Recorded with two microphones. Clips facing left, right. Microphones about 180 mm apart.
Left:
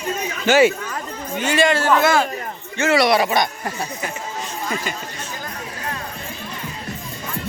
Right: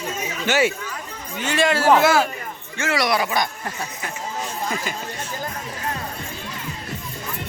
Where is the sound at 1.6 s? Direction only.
5° right (ahead or behind).